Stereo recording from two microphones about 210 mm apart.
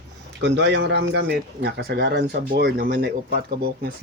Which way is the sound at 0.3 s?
55° right (ahead or behind).